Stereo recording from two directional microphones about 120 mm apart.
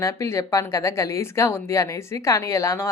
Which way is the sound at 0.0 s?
25° left (ahead or behind).